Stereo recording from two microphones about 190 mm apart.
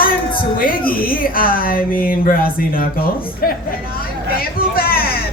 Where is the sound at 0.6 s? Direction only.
50° left (ahead or behind).